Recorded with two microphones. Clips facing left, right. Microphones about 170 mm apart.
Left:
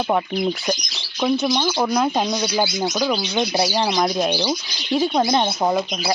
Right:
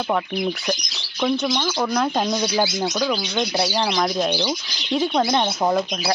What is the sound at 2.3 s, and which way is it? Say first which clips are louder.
Speech: even; centre (ahead or behind).